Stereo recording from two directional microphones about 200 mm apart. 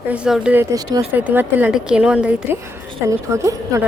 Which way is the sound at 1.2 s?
10° right (ahead or behind).